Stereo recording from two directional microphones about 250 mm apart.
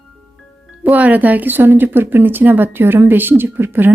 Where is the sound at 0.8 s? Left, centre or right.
Centre.